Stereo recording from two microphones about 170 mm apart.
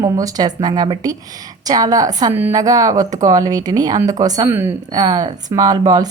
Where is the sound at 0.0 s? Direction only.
20° right (ahead or behind).